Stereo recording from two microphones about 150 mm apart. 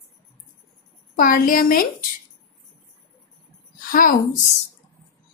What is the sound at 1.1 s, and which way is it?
Speech, 65° left (ahead or behind).